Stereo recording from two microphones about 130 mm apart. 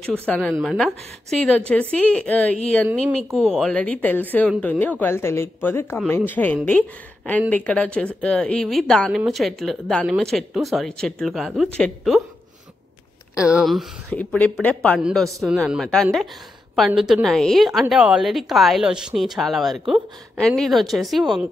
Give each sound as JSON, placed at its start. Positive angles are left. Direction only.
{"t": 0.3, "sound": "a woman's voice", "side_deg": 5}
{"t": 13.4, "sound": "a woman's voice", "side_deg": -5}
{"t": 14.3, "sound": "a woman's voice", "side_deg": 10}
{"t": 15.0, "sound": "a woman's voice", "side_deg": -5}